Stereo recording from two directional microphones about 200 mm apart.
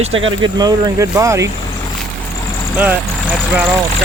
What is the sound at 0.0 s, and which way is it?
Speech, 25° right (ahead or behind).